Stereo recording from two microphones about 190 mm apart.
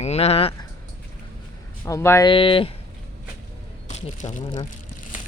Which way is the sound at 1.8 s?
15° left (ahead or behind).